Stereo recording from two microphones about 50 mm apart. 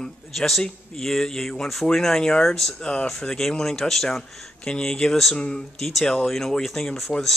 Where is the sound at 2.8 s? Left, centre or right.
Centre.